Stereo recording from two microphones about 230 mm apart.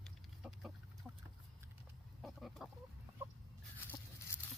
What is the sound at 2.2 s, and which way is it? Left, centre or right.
Chicken, centre.